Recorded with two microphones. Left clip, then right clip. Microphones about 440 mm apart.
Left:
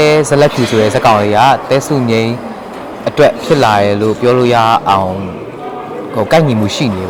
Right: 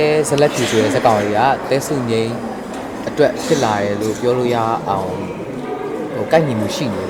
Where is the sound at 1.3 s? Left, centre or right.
Left.